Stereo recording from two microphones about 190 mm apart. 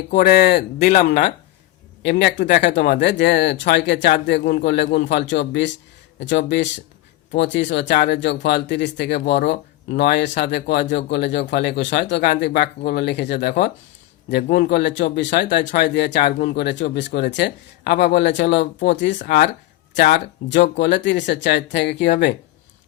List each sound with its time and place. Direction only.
0.1 s speech: 45° left (ahead or behind)
0.9 s speech: 45° left (ahead or behind)
2.0 s speech: 60° left (ahead or behind)
15.7 s speech: 55° left (ahead or behind)